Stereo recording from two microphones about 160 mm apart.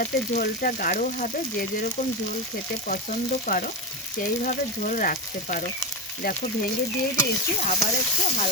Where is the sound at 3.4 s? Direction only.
60° left (ahead or behind).